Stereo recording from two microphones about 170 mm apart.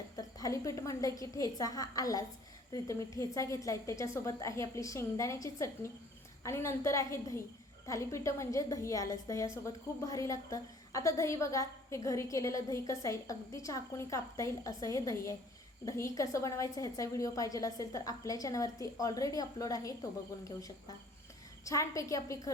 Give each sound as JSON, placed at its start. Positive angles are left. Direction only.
{"t": 0.2, "sound": "a woman's voice", "side_deg": 20}